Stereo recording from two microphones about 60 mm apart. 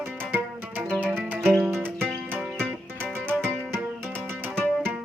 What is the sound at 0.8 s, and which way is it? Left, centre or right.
Music, centre.